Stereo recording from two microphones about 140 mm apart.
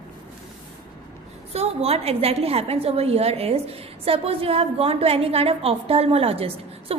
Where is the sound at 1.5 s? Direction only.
45° right (ahead or behind).